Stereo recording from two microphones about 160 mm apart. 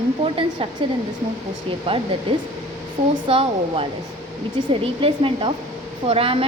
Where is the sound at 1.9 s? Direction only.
35° right (ahead or behind).